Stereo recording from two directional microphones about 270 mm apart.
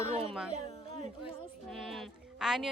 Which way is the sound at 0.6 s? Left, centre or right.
Left.